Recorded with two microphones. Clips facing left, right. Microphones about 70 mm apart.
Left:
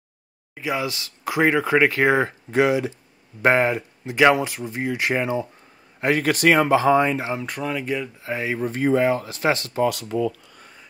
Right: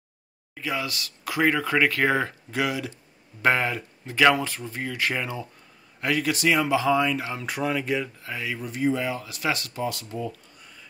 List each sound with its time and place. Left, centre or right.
0.6 s a man's voice: centre
6.2 s speech: left
7.4 s speech: centre
8.2 s speech: left
8.5 s speech: left
9.8 s speech: left